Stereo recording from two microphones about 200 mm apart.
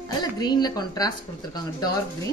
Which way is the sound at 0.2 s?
20° left (ahead or behind).